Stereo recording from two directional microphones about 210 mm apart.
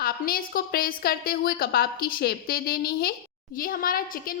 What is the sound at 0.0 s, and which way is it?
A woman's voice, 45° left (ahead or behind).